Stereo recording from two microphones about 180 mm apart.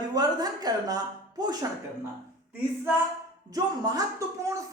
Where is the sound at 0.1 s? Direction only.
20° right (ahead or behind).